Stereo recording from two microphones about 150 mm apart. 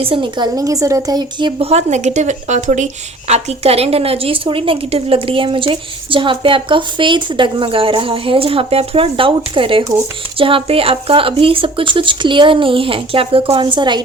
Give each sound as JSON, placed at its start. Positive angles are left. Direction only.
{"t": 0.0, "sound": "a woman's voice", "side_deg": -35}
{"t": 1.5, "sound": "speech", "side_deg": -45}